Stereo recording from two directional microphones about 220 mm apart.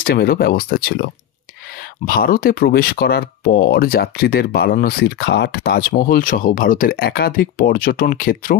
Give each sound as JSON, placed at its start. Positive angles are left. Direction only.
{"t": 0.0, "sound": "speech", "side_deg": 45}